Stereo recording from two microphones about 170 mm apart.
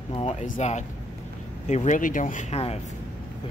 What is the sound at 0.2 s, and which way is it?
Speech, 40° left (ahead or behind).